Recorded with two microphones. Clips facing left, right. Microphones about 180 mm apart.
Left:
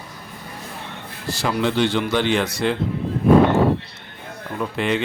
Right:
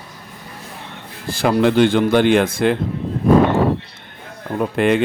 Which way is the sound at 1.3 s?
55° right (ahead or behind).